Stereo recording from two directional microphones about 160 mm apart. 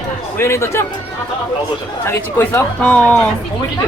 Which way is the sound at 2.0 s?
15° left (ahead or behind).